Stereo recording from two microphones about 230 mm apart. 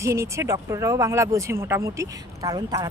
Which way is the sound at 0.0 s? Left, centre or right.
Centre.